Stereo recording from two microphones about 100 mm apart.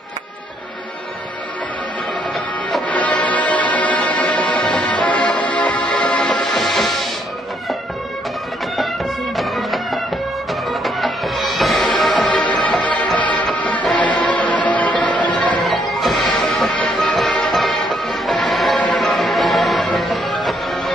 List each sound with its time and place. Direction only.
2.9 s music: 15° left (ahead or behind)
9.4 s music: centre (ahead or behind)
12.7 s music: 15° left (ahead or behind)
13.2 s music: 55° left (ahead or behind)
13.8 s music: 10° left (ahead or behind)
15.0 s music: 50° left (ahead or behind)
15.3 s music: 15° left (ahead or behind)
15.6 s music: centre (ahead or behind)